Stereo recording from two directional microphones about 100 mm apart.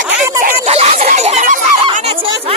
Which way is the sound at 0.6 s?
90° right.